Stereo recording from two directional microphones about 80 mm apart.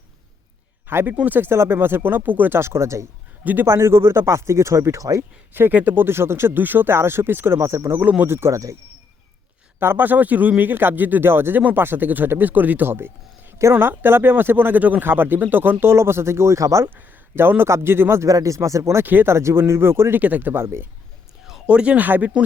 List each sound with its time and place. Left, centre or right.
0.9 s speech: right
3.4 s speech: right
3.7 s speech: right
5.5 s speech: right
9.8 s speech: right
16.9 s speech: right
18.3 s speech: right
19.0 s speech: right
21.4 s speech: centre